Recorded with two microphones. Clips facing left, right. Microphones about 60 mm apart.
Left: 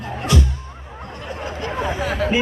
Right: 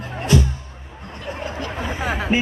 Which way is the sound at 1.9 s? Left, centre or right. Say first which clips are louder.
Left 2 dB; centre.